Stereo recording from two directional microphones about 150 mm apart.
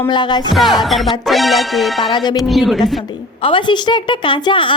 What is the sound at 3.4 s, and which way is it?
A woman's voice, 30° left (ahead or behind).